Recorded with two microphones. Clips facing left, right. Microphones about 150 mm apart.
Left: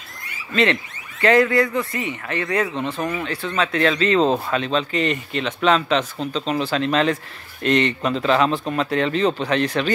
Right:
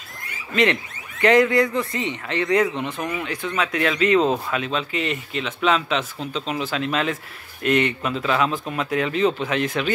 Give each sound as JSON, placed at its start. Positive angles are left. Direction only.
{"t": 0.5, "sound": "speech", "side_deg": -20}
{"t": 2.7, "sound": "speech", "side_deg": 15}
{"t": 3.1, "sound": "speech", "side_deg": -10}